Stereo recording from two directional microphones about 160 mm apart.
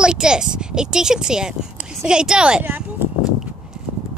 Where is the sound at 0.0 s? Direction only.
5° right (ahead or behind).